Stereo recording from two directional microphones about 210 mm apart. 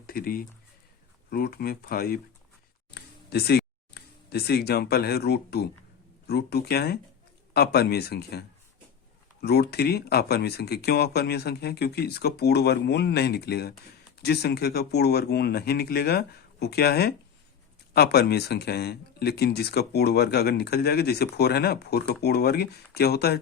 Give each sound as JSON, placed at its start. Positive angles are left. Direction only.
{"t": 0.1, "sound": "speech", "side_deg": 45}